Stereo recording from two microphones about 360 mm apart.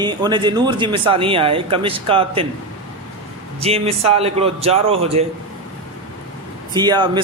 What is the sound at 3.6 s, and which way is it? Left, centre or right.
Speech, centre.